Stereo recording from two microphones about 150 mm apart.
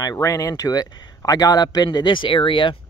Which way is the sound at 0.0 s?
25° left (ahead or behind).